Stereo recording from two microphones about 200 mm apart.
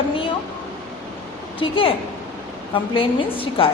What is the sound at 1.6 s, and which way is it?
Speech, 25° left (ahead or behind).